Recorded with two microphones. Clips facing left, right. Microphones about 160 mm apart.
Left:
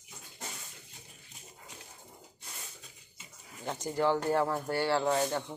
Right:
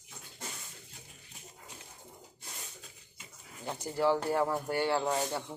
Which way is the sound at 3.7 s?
5° right (ahead or behind).